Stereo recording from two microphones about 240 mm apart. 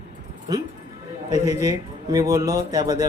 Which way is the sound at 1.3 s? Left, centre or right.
Centre.